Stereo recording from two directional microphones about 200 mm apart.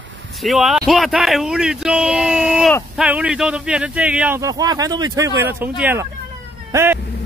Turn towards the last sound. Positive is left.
turn(degrees=-10)  # may be behind; listen again after turning